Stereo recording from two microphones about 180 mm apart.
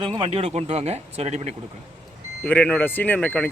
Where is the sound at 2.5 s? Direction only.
5° left (ahead or behind).